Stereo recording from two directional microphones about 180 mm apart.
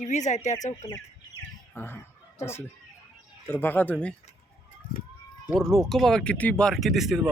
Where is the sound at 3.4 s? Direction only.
10° left (ahead or behind).